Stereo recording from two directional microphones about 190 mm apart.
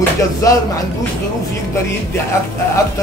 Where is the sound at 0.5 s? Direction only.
20° left (ahead or behind).